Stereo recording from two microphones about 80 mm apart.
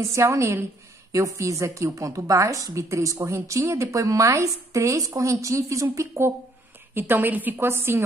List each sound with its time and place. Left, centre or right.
0.1 s a woman's voice: right